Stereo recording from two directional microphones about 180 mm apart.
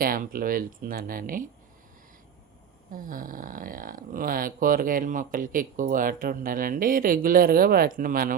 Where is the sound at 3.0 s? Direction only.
50° right (ahead or behind).